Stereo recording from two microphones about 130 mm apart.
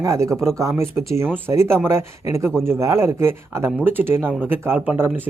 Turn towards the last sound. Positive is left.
turn(degrees=-15)  # may be behind; listen again after turning